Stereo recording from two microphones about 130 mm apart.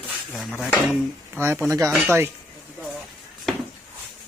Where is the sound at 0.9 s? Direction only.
15° right (ahead or behind).